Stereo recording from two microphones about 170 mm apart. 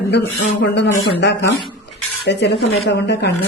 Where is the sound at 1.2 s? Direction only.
90° left.